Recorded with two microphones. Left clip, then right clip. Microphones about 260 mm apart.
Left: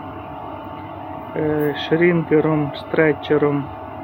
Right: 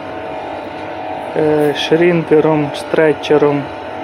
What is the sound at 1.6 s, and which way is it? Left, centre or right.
Speech, centre.